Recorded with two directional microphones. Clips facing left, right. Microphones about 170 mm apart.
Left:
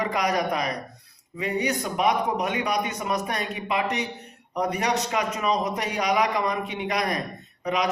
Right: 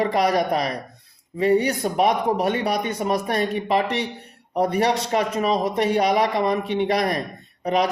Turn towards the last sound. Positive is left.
turn(degrees=-30)  # may be behind; listen again after turning